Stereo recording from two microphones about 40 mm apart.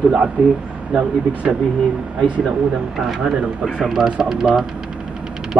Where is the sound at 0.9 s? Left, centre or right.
Right.